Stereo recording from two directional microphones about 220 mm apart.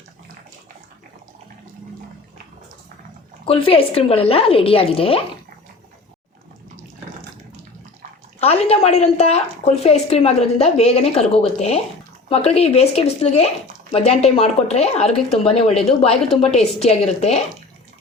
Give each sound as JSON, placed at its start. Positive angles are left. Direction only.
{"t": 3.4, "sound": "a woman's voice", "side_deg": 25}
{"t": 8.4, "sound": "a woman's voice", "side_deg": 25}